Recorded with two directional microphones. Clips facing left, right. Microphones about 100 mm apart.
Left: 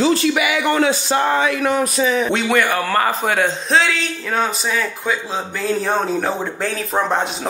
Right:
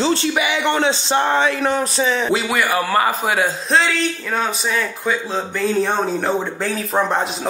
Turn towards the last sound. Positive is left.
turn(degrees=0)  # may be behind; listen again after turning